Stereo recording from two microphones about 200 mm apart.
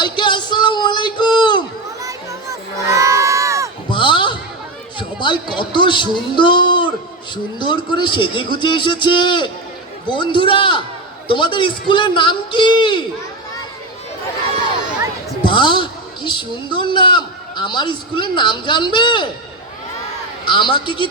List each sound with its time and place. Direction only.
0.0 s speech: 25° left (ahead or behind)
2.0 s a sound: 15° right (ahead or behind)
3.8 s basketball bounce: 25° left (ahead or behind)
4.9 s a man's voice: 25° left (ahead or behind)
15.4 s a woman's voice: 25° left (ahead or behind)
20.4 s a man's voice: 25° left (ahead or behind)